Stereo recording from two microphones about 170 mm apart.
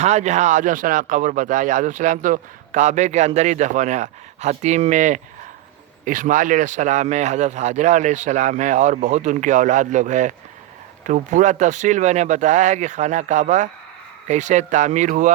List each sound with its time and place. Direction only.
0.0 s speech: 40° right (ahead or behind)